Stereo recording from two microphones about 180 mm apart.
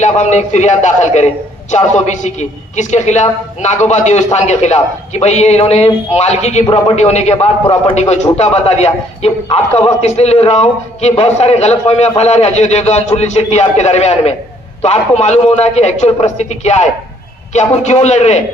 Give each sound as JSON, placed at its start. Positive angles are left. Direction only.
{"t": 0.0, "sound": "a man's voice", "side_deg": 40}